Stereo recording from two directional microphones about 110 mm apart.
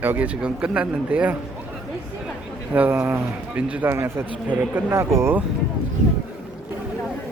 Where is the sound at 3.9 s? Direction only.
20° right (ahead or behind).